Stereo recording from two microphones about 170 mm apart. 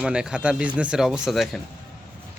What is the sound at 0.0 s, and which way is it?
Speech, 5° right (ahead or behind).